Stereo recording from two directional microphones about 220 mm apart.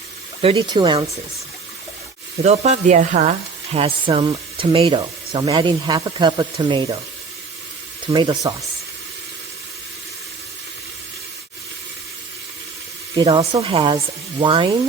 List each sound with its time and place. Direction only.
0.4 s speech: 20° right (ahead or behind)
2.4 s speech: 30° right (ahead or behind)
8.0 s speech: 20° right (ahead or behind)
13.1 s speech: 20° right (ahead or behind)